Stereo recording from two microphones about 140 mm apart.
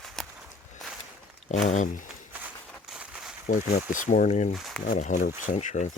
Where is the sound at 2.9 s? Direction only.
5° right (ahead or behind).